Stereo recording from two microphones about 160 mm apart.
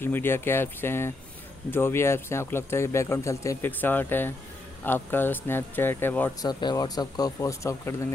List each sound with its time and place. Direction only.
0.0 s speech: 15° left (ahead or behind)
6.4 s speech: 25° left (ahead or behind)